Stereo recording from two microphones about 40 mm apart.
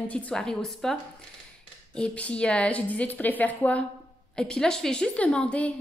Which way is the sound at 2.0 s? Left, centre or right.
Left.